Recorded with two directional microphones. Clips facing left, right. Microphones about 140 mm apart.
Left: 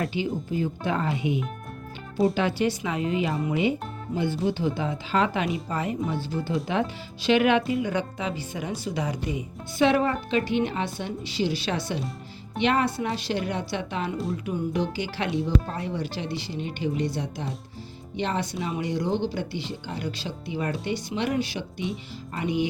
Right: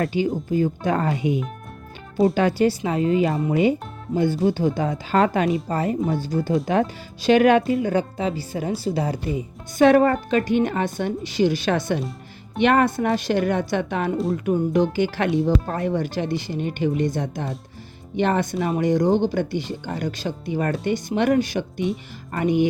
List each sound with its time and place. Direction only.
0.1 s a woman's voice: 45° right (ahead or behind)
9.3 s a woman's voice: 45° right (ahead or behind)